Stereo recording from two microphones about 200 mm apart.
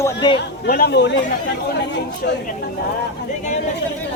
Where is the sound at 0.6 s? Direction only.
50° left (ahead or behind).